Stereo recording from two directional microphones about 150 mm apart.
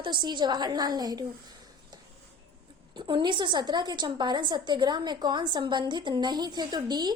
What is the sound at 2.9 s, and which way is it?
A woman's voice, 30° right (ahead or behind).